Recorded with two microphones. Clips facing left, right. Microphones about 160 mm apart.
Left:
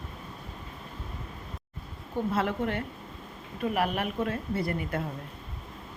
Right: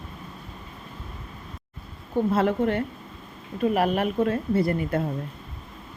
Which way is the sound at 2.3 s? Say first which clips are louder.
Right 6 dB; 35° right (ahead or behind).